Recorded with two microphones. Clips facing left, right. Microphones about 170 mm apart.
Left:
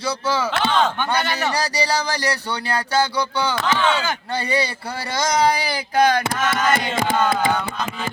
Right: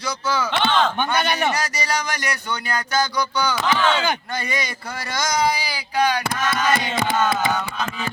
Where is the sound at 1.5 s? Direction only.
35° left (ahead or behind).